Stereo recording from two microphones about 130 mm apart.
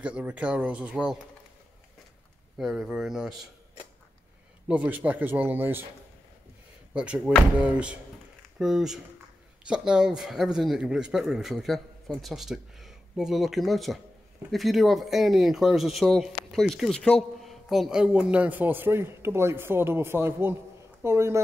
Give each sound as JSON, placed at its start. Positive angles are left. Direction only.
{"t": 0.0, "sound": "speech", "side_deg": -10}
{"t": 2.5, "sound": "speech", "side_deg": -5}
{"t": 4.6, "sound": "speech", "side_deg": -10}
{"t": 6.9, "sound": "speech", "side_deg": -10}